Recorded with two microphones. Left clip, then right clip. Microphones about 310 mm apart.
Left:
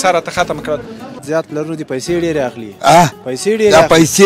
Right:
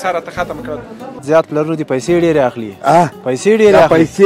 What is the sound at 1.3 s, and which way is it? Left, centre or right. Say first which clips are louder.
Speech: right 6 dB; centre.